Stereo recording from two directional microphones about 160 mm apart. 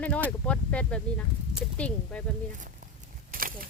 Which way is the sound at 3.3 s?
60° right (ahead or behind).